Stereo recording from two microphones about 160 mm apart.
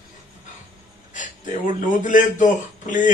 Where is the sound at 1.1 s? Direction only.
55° left (ahead or behind).